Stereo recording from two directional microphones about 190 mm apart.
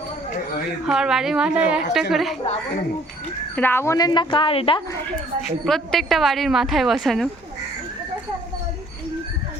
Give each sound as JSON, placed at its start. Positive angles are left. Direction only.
{"t": 0.9, "sound": "a woman's voice", "side_deg": -5}
{"t": 3.5, "sound": "a woman's voice", "side_deg": 10}
{"t": 4.9, "sound": "speech", "side_deg": 15}
{"t": 5.4, "sound": "a woman's voice", "side_deg": 0}